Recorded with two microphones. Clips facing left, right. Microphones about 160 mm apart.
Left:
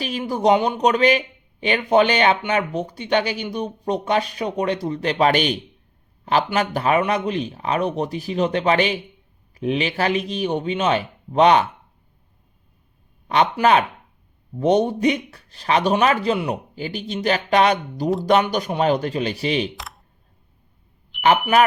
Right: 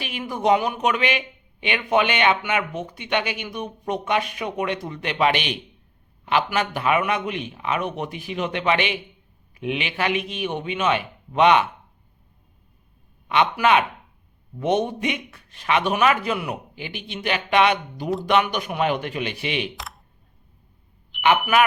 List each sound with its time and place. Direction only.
0.0 s speech: 35° left (ahead or behind)
13.2 s speech: 35° left (ahead or behind)
19.7 s computer keyboard: centre (ahead or behind)
21.1 s a sound: centre (ahead or behind)